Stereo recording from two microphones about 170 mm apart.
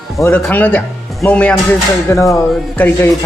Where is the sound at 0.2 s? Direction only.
10° left (ahead or behind).